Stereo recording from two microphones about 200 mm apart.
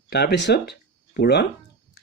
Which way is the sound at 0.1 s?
55° left (ahead or behind).